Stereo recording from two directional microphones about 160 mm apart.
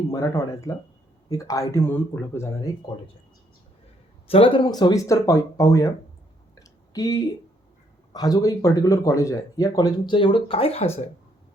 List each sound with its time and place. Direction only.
0.1 s speech: 20° left (ahead or behind)
4.3 s speech: 35° left (ahead or behind)
6.6 s a sound: 20° left (ahead or behind)
8.1 s speech: 25° left (ahead or behind); by 11.0 s 40° left (ahead or behind)